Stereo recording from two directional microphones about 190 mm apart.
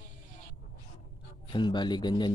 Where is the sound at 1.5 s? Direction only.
25° left (ahead or behind).